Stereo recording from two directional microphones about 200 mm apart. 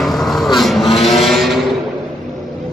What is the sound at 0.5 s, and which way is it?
Vehicle, centre (ahead or behind).